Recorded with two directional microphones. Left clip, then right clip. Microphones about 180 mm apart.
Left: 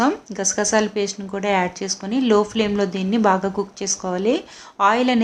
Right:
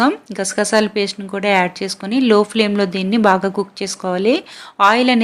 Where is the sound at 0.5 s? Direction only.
20° right (ahead or behind).